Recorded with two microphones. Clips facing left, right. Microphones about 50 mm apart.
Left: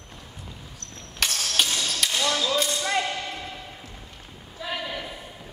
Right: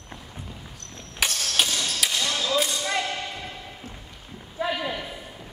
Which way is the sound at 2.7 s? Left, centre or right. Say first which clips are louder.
Left 1 dB; centre.